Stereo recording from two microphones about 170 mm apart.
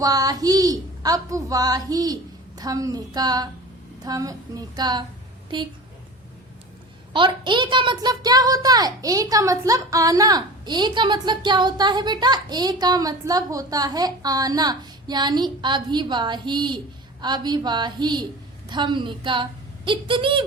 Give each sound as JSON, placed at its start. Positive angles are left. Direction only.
{"t": 0.0, "sound": "a child's voice", "side_deg": -20}
{"t": 7.1, "sound": "a child's voice", "side_deg": -30}